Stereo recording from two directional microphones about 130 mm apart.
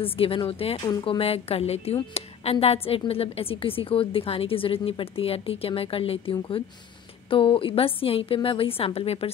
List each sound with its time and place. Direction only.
0.0 s a woman's voice: 45° left (ahead or behind)